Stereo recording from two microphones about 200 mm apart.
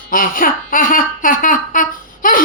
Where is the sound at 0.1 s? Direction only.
45° left (ahead or behind).